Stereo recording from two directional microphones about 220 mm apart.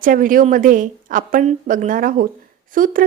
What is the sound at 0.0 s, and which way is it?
A woman's voice, 40° right (ahead or behind).